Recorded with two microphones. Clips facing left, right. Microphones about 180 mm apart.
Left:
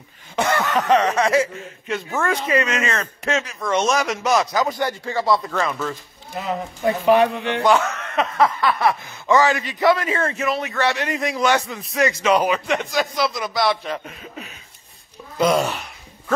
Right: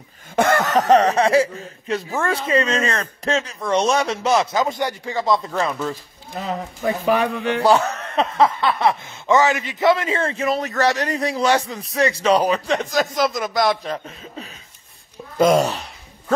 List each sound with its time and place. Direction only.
0.4 s speech: 45° right (ahead or behind); by 5.6 s 15° right (ahead or behind)
7.4 s speech: 35° right (ahead or behind)
14.0 s speech: 30° right (ahead or behind)
15.3 s a sound: 45° right (ahead or behind)